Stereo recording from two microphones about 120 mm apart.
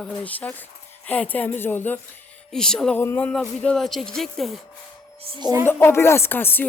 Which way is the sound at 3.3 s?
5° left (ahead or behind).